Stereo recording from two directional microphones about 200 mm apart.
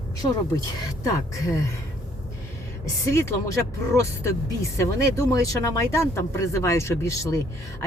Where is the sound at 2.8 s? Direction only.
15° left (ahead or behind).